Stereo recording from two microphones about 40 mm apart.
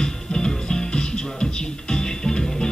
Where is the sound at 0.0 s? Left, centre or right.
Centre.